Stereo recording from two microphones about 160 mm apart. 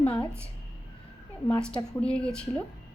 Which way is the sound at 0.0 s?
10° left (ahead or behind).